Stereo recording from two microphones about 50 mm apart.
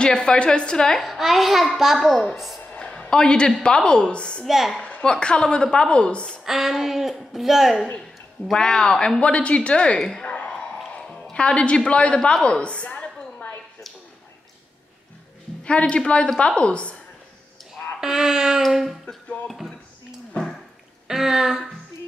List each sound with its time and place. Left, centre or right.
0.0 s a woman's voice: centre
1.0 s a woman's voice: centre
2.6 s a woman's voice: left
4.5 s speech: centre
4.7 s a sound: left
5.0 s a woman's voice: centre
6.4 s speech: centre
8.5 s a woman's voice: centre
10.2 s a sound: left
11.3 s a woman's voice: left
12.4 s a sound: left
15.6 s a woman's voice: left
18.0 s speech: centre
21.1 s speech: centre